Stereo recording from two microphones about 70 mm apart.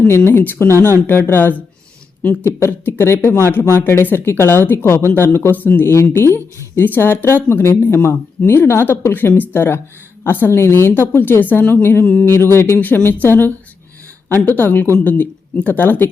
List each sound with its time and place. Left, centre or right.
0.3 s a woman's voice: left
2.6 s a woman's voice: left
5.9 s a woman's voice: left